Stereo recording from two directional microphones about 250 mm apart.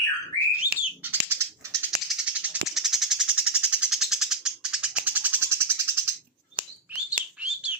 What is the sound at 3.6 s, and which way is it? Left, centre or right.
Bird, centre.